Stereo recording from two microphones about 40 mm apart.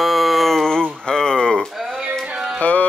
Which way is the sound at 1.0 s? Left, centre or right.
Centre.